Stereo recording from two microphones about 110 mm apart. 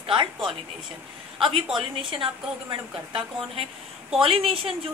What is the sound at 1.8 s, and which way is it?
A woman's voice, 50° right (ahead or behind).